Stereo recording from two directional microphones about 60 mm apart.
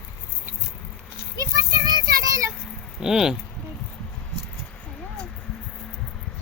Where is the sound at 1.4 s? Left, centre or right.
Right.